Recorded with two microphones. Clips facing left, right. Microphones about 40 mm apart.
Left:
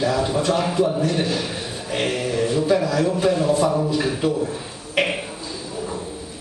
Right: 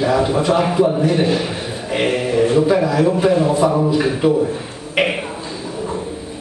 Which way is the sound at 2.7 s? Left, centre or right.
Centre.